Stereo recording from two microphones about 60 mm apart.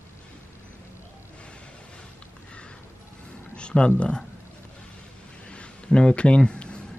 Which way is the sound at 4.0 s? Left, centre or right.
Centre.